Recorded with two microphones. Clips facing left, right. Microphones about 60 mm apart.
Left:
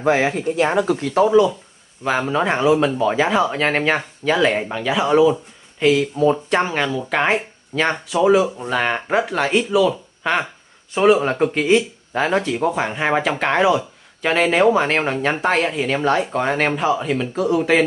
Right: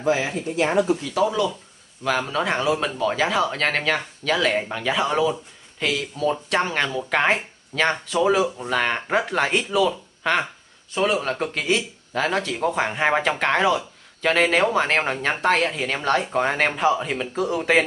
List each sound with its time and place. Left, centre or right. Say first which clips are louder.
0.0 s speech: left 5 dB; left
1.2 s speech: left 10 dB; left
4.6 s speech: left 4 dB; centre
6.7 s speech: left 2 dB; centre